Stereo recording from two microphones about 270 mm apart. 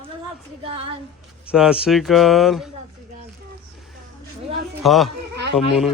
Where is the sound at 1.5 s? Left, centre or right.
Centre.